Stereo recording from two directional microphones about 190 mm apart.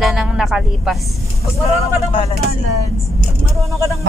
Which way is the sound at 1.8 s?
35° left (ahead or behind).